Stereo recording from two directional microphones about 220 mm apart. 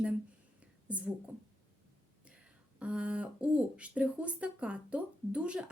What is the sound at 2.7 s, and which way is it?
Speech, 5° right (ahead or behind).